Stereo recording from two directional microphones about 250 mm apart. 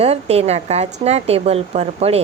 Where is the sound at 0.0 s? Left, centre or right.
Right.